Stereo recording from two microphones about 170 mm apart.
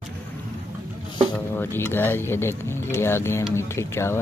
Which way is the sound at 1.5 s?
15° left (ahead or behind).